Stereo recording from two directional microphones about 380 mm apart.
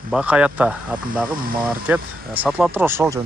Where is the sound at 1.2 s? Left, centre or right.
Right.